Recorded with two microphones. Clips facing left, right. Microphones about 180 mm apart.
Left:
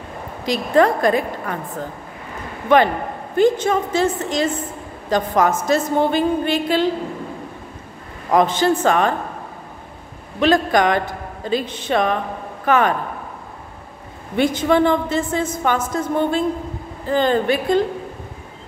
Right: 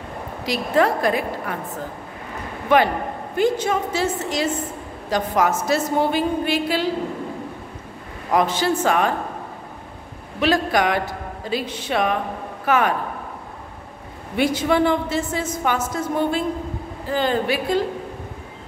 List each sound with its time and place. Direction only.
0.5 s a woman's voice: 5° right (ahead or behind)
3.3 s a woman's voice: 10° right (ahead or behind)
8.4 s a woman's voice: 5° right (ahead or behind)
10.4 s a woman's voice: 5° right (ahead or behind)
14.3 s a woman's voice: 10° right (ahead or behind)